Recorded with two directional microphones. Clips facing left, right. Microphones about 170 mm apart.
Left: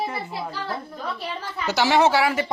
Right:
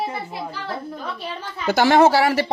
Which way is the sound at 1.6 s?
50° right (ahead or behind).